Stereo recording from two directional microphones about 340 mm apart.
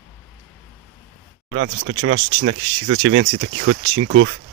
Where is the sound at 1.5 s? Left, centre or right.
Right.